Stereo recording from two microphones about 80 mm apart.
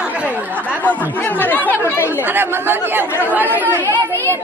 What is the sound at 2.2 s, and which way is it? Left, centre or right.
Speech, right.